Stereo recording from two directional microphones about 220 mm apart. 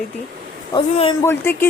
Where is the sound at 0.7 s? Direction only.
25° left (ahead or behind).